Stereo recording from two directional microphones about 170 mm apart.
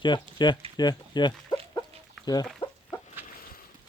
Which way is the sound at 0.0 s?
25° left (ahead or behind).